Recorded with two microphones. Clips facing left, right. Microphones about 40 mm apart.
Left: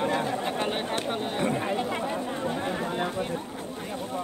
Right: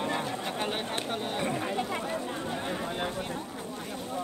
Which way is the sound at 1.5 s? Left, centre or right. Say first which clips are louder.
Left 3 dB; left.